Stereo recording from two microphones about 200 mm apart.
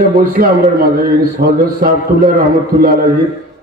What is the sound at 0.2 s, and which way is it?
A man's voice, 45° right (ahead or behind).